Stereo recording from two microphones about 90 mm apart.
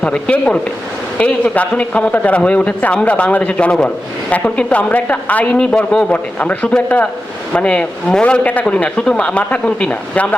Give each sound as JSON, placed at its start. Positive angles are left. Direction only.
{"t": 0.0, "sound": "a man's voice", "side_deg": 15}